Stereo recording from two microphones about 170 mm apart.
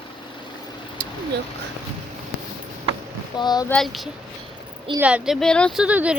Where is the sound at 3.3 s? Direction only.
25° left (ahead or behind).